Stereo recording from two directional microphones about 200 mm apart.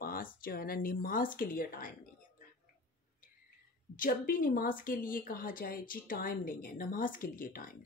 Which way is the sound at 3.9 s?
45° left (ahead or behind).